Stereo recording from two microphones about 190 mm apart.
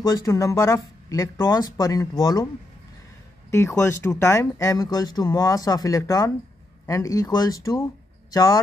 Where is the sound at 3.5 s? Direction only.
15° left (ahead or behind).